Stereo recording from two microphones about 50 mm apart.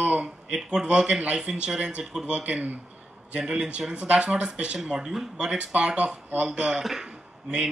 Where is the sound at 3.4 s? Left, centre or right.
Centre.